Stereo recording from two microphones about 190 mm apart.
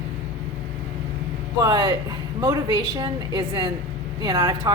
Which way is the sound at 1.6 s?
20° right (ahead or behind).